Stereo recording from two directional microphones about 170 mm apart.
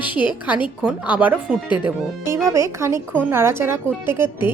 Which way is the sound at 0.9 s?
10° right (ahead or behind).